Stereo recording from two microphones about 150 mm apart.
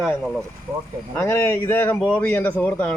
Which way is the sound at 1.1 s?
15° left (ahead or behind).